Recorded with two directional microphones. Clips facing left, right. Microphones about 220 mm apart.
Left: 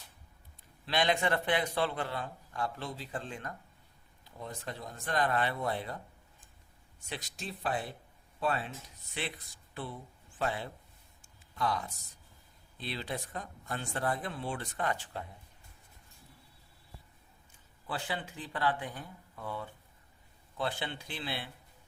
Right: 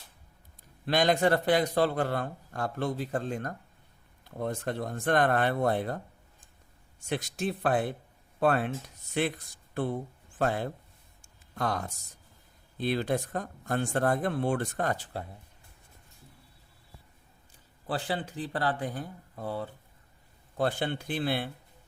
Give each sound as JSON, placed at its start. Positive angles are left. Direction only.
{"t": 0.9, "sound": "a man's voice", "side_deg": -45}
{"t": 4.2, "sound": "speech", "side_deg": -55}
{"t": 7.1, "sound": "a man's voice", "side_deg": -50}
{"t": 11.2, "sound": "a sound", "side_deg": -45}
{"t": 12.7, "sound": "a man's voice", "side_deg": -50}
{"t": 17.8, "sound": "speech", "side_deg": -35}
{"t": 20.6, "sound": "a man's voice", "side_deg": -50}